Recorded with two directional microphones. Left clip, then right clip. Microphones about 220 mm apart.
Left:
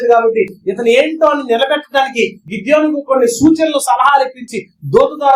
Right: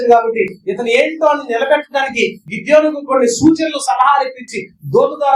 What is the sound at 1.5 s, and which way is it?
A man's voice, 45° left (ahead or behind).